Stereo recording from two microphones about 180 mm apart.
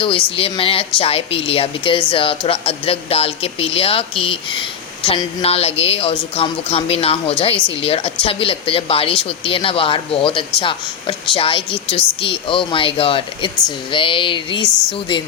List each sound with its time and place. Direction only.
0.3 s a woman's voice: 30° left (ahead or behind)